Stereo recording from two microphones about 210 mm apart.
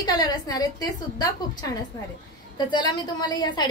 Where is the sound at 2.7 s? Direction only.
20° left (ahead or behind).